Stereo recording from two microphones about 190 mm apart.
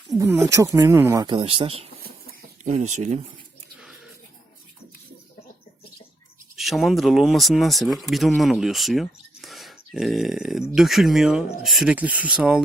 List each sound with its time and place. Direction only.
0.1 s speech: 15° right (ahead or behind); by 3.2 s 40° right (ahead or behind)
6.6 s speech: centre (ahead or behind)